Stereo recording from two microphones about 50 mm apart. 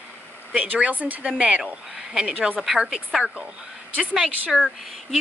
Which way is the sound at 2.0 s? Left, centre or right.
Centre.